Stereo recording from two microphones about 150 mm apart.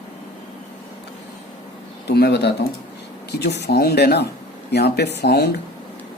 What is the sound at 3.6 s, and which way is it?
Speech, 90° left.